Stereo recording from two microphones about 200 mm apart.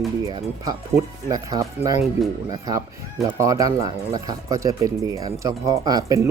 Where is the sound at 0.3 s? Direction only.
20° right (ahead or behind).